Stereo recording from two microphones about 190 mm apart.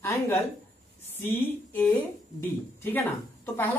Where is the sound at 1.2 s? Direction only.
10° left (ahead or behind).